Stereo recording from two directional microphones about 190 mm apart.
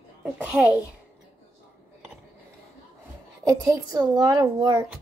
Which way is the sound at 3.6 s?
20° right (ahead or behind).